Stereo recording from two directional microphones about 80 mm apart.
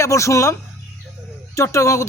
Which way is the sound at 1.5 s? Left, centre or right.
Left.